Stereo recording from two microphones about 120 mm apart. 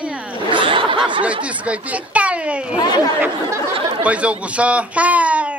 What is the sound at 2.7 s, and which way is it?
Speech, 35° left (ahead or behind).